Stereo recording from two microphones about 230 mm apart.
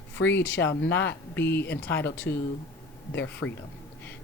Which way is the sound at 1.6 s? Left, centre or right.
Left.